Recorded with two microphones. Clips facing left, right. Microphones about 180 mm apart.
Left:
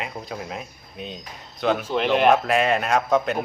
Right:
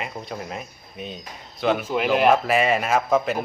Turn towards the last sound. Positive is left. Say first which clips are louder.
# even
turn(degrees=0)  # may be behind; listen again after turning